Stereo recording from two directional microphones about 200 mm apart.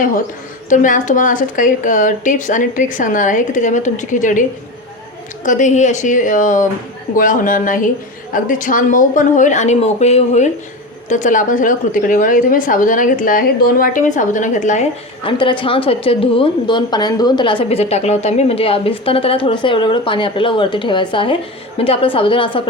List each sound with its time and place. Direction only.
0.7 s a woman's voice: 40° left (ahead or behind)
5.5 s a woman's voice: 40° left (ahead or behind)
15.2 s a woman's voice: 25° left (ahead or behind)